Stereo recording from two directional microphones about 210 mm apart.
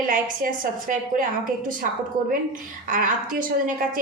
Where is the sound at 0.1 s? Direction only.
40° right (ahead or behind).